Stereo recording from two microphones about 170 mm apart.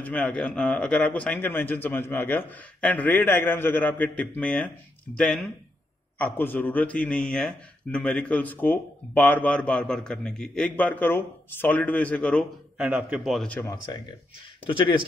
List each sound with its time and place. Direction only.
0.0 s a man's voice: 5° left (ahead or behind)
12.7 s a man's voice: 10° right (ahead or behind)
14.7 s speech: 30° left (ahead or behind)